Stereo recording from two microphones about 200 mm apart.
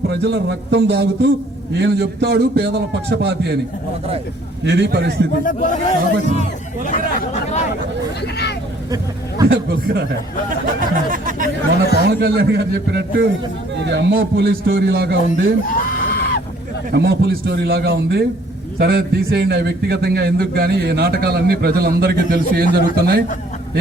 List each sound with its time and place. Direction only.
0.1 s a man's voice: 55° right (ahead or behind)
4.6 s a man's voice: 60° right (ahead or behind)
5.5 s a man's voice: 40° left (ahead or behind)
9.5 s a man's voice: 60° right (ahead or behind)
10.8 s speech: 45° right (ahead or behind)
12.0 s a man's voice: 60° right (ahead or behind)
15.9 s a sound: 45° left (ahead or behind)
16.9 s a man's voice: 55° right (ahead or behind)